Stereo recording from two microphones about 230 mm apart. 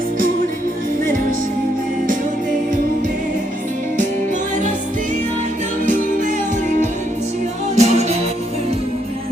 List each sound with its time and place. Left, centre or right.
5.9 s music: right
7.8 s music: right